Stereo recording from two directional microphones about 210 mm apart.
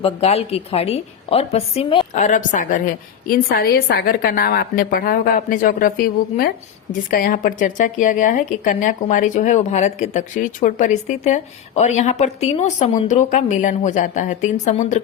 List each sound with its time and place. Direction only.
0.0 s a woman's voice: 30° left (ahead or behind)
2.1 s a woman's voice: 35° left (ahead or behind)